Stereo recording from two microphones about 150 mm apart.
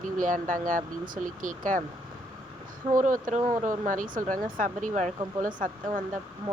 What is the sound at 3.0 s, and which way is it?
Speech, 60° right (ahead or behind).